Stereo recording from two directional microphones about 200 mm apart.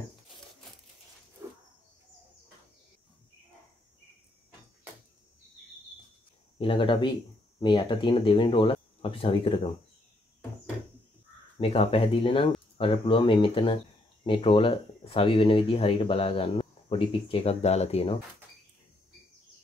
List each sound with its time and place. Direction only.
6.6 s speech: 25° left (ahead or behind)
11.5 s speech: 30° left (ahead or behind)